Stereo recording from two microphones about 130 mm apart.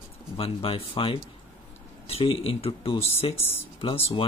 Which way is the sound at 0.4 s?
45° left (ahead or behind).